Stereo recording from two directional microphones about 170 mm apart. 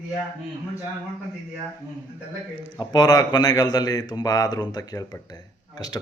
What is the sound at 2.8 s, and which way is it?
Speech, 25° left (ahead or behind).